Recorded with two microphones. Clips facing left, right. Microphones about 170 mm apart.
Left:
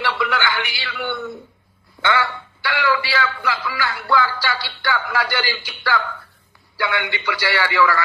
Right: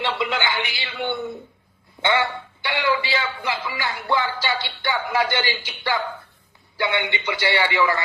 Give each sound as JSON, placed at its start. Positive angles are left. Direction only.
{"t": 0.2, "sound": "a man's voice", "side_deg": -20}